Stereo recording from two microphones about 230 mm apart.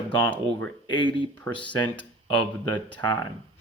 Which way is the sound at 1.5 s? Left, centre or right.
Left.